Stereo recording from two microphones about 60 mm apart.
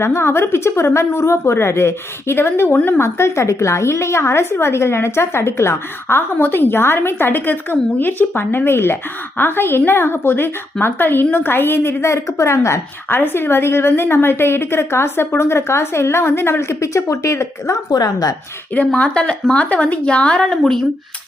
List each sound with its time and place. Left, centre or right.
0.0 s a woman's voice: left
13.1 s a woman's voice: left
18.0 s speech: left
18.9 s a woman's voice: centre